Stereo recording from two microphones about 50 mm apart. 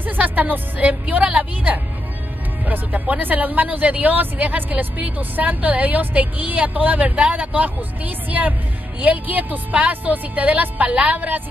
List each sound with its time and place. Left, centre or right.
0.0 s a woman's voice: right